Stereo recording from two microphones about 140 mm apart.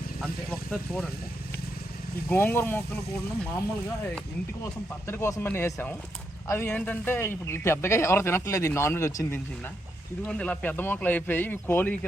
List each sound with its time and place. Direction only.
0.7 s speech: 5° left (ahead or behind)
2.3 s speech: 15° left (ahead or behind)
4.6 s speech: 20° left (ahead or behind)
10.2 s speech: 10° left (ahead or behind)